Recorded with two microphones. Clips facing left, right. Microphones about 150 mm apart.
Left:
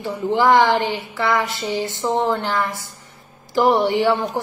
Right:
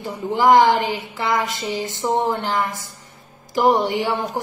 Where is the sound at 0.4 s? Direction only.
20° right (ahead or behind).